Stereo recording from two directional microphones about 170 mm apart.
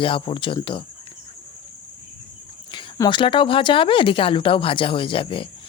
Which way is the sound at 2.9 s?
25° left (ahead or behind).